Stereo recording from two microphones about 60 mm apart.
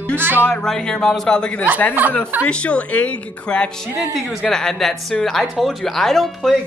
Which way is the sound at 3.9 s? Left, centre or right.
Right.